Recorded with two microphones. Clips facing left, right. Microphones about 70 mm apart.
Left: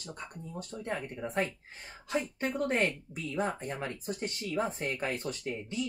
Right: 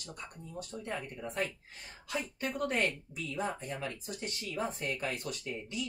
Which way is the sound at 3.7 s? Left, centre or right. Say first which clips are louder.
Left 3 dB; left.